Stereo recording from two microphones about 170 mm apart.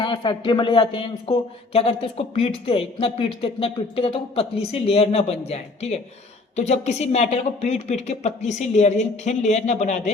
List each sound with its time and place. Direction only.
0.0 s speech: 30° left (ahead or behind); by 10.1 s 45° left (ahead or behind)